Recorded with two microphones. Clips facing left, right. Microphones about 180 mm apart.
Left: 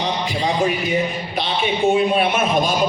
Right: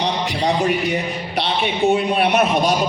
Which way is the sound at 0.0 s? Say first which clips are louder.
Right 1 dB; 70° right (ahead or behind).